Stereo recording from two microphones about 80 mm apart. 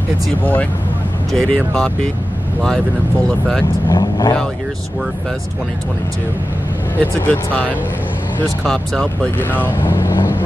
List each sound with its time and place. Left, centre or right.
0.4 s speech: left
3.3 s speech: centre
3.9 s speech: left
7.0 s speech: centre
8.6 s speech: centre
9.8 s vehicle: left